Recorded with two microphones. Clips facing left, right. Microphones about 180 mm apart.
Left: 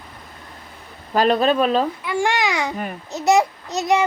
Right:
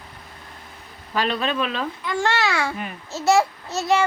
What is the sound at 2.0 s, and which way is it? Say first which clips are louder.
Child singing: left 2 dB; 15° left (ahead or behind).